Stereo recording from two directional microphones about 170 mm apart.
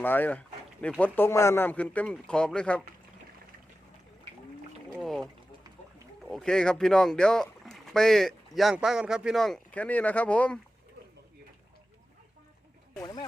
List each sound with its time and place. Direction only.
0.0 s speech: 10° left (ahead or behind)
4.9 s speech: centre (ahead or behind)
13.0 s speech: 25° left (ahead or behind)